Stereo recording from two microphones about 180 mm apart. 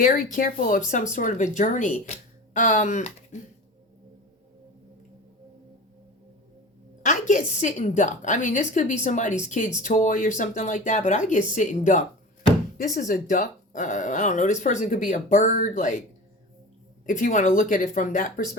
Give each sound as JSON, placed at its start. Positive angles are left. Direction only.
{"t": 0.0, "sound": "speech", "side_deg": 50}
{"t": 7.0, "sound": "speech", "side_deg": 45}
{"t": 17.1, "sound": "speech", "side_deg": 45}